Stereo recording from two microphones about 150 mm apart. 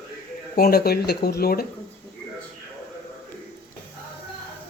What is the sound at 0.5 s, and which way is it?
Speech, 85° left.